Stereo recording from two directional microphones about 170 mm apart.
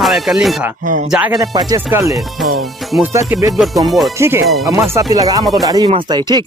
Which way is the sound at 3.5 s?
Centre (ahead or behind).